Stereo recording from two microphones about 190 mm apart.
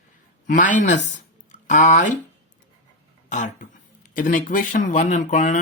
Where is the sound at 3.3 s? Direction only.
40° left (ahead or behind).